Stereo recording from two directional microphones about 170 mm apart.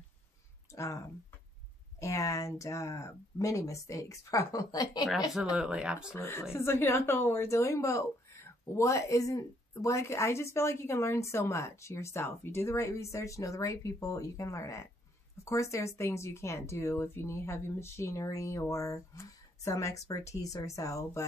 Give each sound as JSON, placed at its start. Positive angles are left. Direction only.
{"t": 0.7, "sound": "speech", "side_deg": 20}
{"t": 5.6, "sound": "speech", "side_deg": -5}
{"t": 6.1, "sound": "a woman's voice", "side_deg": 15}